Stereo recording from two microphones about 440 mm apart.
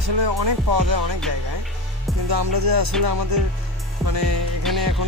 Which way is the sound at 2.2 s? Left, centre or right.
Right.